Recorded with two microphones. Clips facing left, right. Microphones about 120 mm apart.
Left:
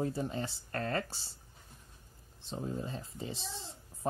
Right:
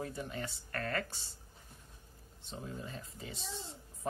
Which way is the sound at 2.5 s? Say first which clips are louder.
Left 6 dB; 30° left (ahead or behind).